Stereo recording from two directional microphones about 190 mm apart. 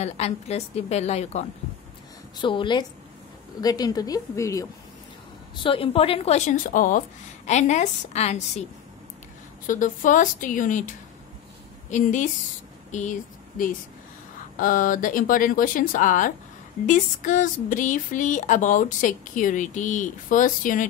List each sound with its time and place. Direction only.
0.0 s a woman's voice: 35° left (ahead or behind)
2.3 s a woman's voice: 25° left (ahead or behind)
5.6 s a woman's voice: 30° left (ahead or behind)
9.7 s a woman's voice: 45° left (ahead or behind)
14.6 s speech: 45° left (ahead or behind)